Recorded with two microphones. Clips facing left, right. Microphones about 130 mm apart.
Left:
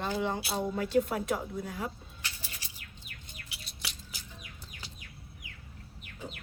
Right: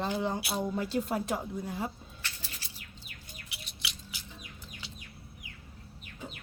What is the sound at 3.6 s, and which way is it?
Bird, 40° left (ahead or behind).